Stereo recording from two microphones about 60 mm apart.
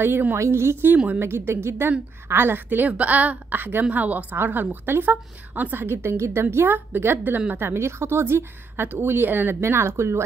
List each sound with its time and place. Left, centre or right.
0.0 s a woman's voice: right
0.9 s a woman's voice: right
1.2 s a woman's voice: right
1.9 s a woman's voice: right
9.6 s a woman's voice: right